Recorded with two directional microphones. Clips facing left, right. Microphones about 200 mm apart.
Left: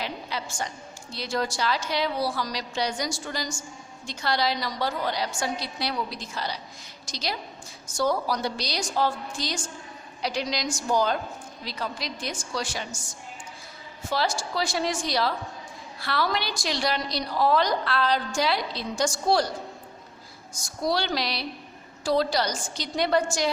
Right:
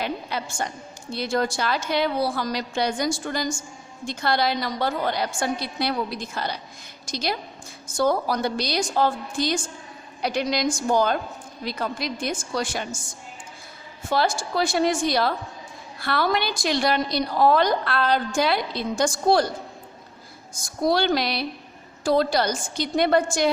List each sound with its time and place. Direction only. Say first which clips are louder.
0.0 s a woman's voice: right 4 dB; 55° right (ahead or behind)
14.1 s a woman's voice: right 4 dB; 55° right (ahead or behind)
20.6 s a woman's voice: right 5 dB; 55° right (ahead or behind)